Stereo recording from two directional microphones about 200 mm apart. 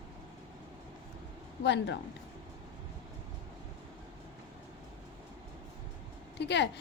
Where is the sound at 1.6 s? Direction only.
60° left (ahead or behind).